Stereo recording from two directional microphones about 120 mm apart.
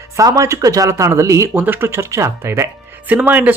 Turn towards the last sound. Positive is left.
turn(degrees=-10)  # may be behind; listen again after turning